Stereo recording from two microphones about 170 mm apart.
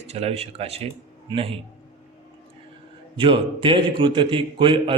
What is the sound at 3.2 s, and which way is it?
A man's voice, 30° right (ahead or behind).